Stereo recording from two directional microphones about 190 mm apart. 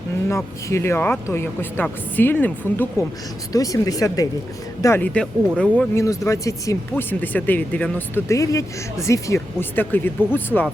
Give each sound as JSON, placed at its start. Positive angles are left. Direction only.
{"t": 0.3, "sound": "speech", "side_deg": 15}